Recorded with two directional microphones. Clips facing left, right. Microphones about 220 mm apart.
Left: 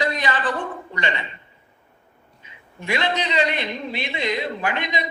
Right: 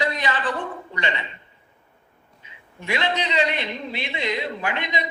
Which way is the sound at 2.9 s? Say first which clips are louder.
Left 1 dB; 45° left (ahead or behind).